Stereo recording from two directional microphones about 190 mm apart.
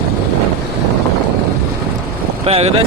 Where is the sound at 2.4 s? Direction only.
30° right (ahead or behind).